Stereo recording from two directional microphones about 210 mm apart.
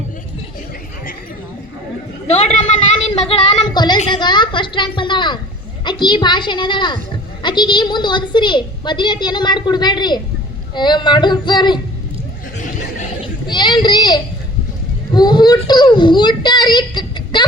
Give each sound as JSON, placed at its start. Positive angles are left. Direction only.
{"t": 2.2, "sound": "a man's voice", "side_deg": 30}
{"t": 3.2, "sound": "a sound", "side_deg": 25}
{"t": 5.8, "sound": "a woman's voice", "side_deg": 20}
{"t": 13.2, "sound": "a child's voice", "side_deg": 20}